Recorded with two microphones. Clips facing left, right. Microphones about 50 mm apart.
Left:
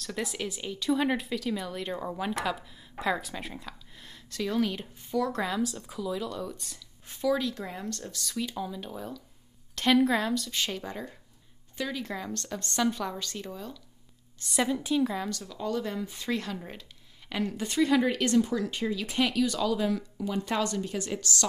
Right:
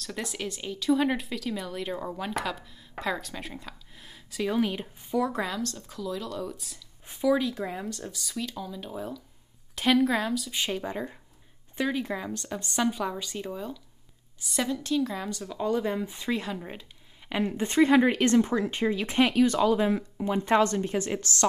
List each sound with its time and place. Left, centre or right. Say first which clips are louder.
0.0 s speech: left 1 dB; centre
5.4 s speech: left 1 dB; centre
7.1 s a woman's voice: right 3 dB; centre
8.4 s speech: left 2 dB; centre
8.8 s speech: right 3 dB; centre
10.5 s a woman's voice: right 3 dB; centre
14.4 s speech: left 1 dB; centre
14.7 s a woman's voice: even; centre
15.2 s a woman's voice: right 4 dB; centre
17.6 s speech: right 4 dB; right